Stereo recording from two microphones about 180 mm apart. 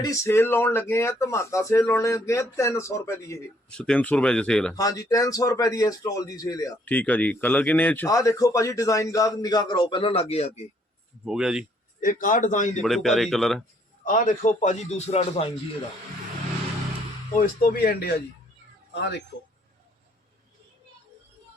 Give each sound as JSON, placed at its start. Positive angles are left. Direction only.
{"t": 0.0, "sound": "speech", "side_deg": 15}
{"t": 3.7, "sound": "speech", "side_deg": 5}
{"t": 4.7, "sound": "a man's voice", "side_deg": 20}
{"t": 6.8, "sound": "speech", "side_deg": 10}
{"t": 11.3, "sound": "speech", "side_deg": -5}
{"t": 11.9, "sound": "a man's voice", "side_deg": 50}
{"t": 12.8, "sound": "speech", "side_deg": 0}
{"t": 14.0, "sound": "a man's voice", "side_deg": 45}
{"t": 17.3, "sound": "a man's voice", "side_deg": 50}